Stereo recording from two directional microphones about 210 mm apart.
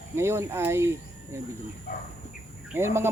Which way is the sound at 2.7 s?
10° right (ahead or behind).